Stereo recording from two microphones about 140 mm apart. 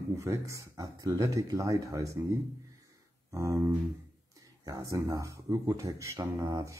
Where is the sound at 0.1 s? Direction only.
20° right (ahead or behind).